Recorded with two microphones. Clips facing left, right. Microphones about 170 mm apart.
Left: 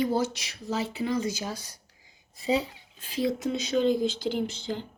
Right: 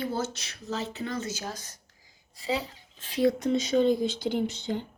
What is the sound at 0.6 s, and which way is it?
Speech, 10° left (ahead or behind).